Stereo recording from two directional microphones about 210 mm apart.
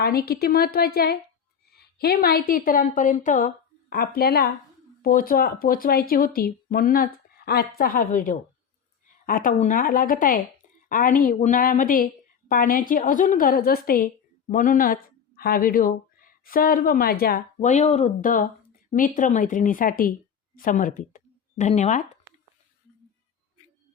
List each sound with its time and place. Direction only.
0.0 s a woman's voice: 45° left (ahead or behind)